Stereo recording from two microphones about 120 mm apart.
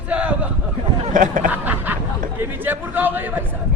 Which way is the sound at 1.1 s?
90° right.